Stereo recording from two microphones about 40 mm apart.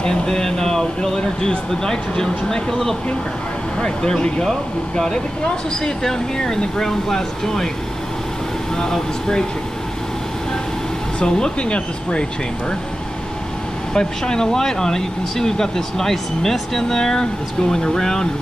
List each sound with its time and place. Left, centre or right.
0.0 s speech: centre
8.7 s speech: centre
11.1 s speech: centre
13.9 s speech: centre